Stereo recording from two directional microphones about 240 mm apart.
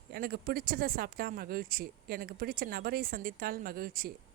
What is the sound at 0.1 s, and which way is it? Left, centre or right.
Speech, right.